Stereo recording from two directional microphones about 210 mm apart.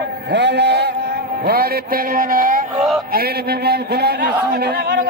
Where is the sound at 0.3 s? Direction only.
55° right (ahead or behind).